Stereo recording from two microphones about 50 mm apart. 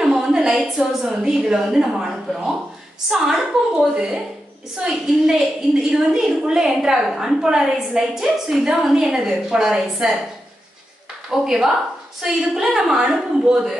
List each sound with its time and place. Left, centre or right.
0.0 s a woman's voice: centre
11.2 s a woman's voice: centre